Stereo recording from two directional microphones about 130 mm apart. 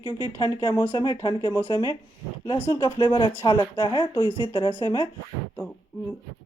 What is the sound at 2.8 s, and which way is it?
Speech, 40° left (ahead or behind).